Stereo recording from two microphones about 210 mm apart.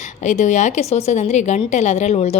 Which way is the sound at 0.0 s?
35° left (ahead or behind).